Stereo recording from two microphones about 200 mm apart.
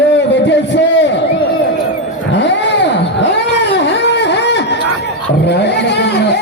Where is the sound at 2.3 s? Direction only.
60° left (ahead or behind).